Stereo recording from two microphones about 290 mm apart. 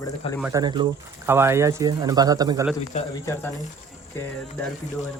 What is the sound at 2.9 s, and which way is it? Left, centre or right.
Speech, left.